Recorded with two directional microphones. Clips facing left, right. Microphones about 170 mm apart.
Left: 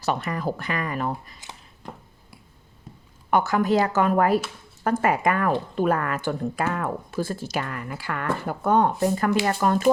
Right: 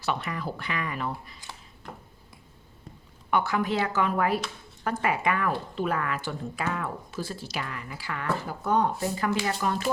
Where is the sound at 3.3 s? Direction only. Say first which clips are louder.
Left 5 dB; 45° left (ahead or behind).